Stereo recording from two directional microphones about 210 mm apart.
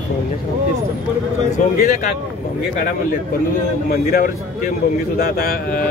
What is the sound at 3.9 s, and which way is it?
A man's voice, 45° left (ahead or behind).